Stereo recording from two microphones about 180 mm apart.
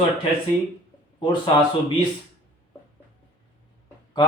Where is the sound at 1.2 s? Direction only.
25° left (ahead or behind).